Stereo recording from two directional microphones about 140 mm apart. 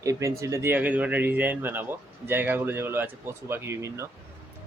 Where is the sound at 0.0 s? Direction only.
25° right (ahead or behind).